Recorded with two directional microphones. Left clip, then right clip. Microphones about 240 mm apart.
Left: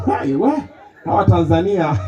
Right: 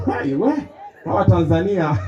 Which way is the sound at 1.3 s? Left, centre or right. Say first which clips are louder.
Left 3 dB; left.